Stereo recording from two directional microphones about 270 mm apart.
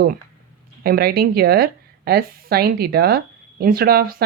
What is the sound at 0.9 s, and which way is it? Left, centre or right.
Speech, right.